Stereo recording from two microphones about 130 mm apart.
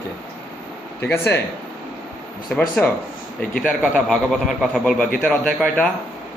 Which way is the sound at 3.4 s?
10° left (ahead or behind).